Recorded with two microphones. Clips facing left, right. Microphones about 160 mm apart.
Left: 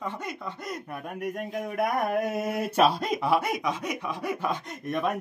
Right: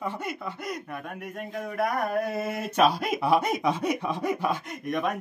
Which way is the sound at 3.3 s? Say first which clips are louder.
Right 3 dB; 20° right (ahead or behind).